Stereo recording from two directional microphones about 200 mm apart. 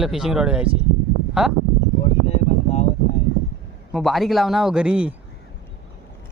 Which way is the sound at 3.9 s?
Centre (ahead or behind).